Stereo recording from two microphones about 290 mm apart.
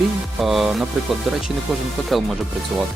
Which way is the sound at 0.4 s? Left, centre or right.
Centre.